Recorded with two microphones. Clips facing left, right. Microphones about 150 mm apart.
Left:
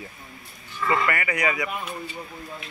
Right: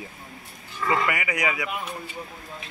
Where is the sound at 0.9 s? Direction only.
15° right (ahead or behind).